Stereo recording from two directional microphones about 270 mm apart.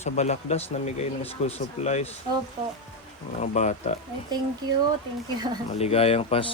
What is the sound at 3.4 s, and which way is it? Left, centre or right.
Speech, left.